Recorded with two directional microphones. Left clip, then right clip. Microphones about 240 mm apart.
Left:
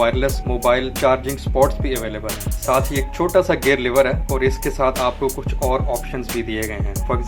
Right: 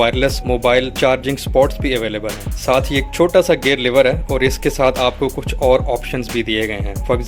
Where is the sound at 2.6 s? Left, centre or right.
Right.